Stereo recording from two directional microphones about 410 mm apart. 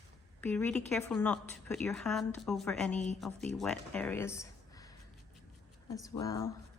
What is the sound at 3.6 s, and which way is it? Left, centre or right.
Speech, centre.